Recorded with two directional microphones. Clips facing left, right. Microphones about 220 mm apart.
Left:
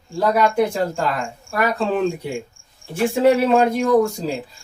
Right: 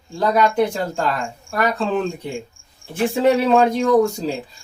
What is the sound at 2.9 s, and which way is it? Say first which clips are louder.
Speech: left 1 dB; 5° left (ahead or behind).